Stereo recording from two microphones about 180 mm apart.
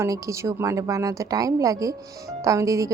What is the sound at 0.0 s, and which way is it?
A woman's voice, 15° right (ahead or behind).